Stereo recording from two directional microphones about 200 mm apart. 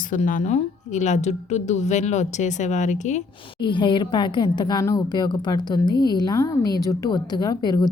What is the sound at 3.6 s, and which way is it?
A woman's voice, 25° left (ahead or behind).